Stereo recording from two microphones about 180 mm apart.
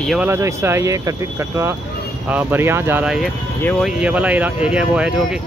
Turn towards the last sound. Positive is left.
turn(degrees=-5)  # may be behind; listen again after turning